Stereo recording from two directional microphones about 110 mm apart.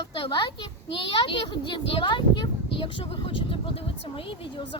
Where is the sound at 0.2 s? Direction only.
45° left (ahead or behind).